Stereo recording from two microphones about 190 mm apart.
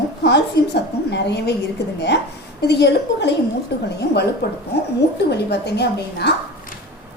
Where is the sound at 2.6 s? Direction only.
65° left (ahead or behind).